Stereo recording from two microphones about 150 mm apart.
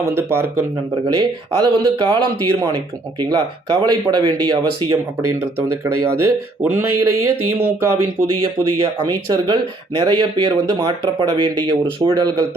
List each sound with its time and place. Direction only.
0.1 s speech: 15° right (ahead or behind)
1.0 s speech: 30° right (ahead or behind)
5.4 s speech: 15° right (ahead or behind)
9.0 s speech: 30° right (ahead or behind)